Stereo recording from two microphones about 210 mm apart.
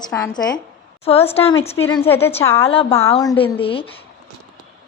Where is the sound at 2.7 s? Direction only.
25° left (ahead or behind).